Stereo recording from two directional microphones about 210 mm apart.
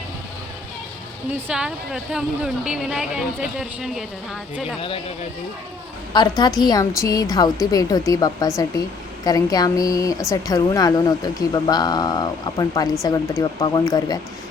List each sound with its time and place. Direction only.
1.3 s speech: 5° right (ahead or behind)
6.1 s a woman's voice: 20° left (ahead or behind)